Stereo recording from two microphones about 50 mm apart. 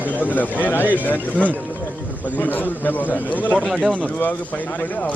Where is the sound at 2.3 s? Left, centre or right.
Left.